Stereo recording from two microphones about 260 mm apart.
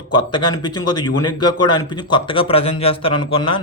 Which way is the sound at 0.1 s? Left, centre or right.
Centre.